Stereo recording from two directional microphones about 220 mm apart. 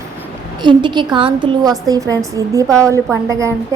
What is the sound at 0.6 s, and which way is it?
A woman's voice, 20° right (ahead or behind).